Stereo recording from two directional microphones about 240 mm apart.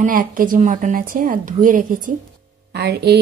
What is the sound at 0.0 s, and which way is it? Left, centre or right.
A woman's voice, right.